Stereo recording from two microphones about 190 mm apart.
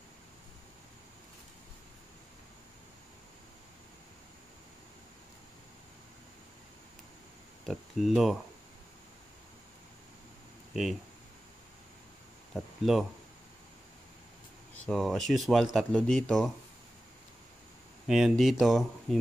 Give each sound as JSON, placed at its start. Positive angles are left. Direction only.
{"t": 7.6, "sound": "speech", "side_deg": 0}
{"t": 10.7, "sound": "speech", "side_deg": 0}
{"t": 12.5, "sound": "speech", "side_deg": 0}
{"t": 14.9, "sound": "speech", "side_deg": 0}
{"t": 18.0, "sound": "speech", "side_deg": 0}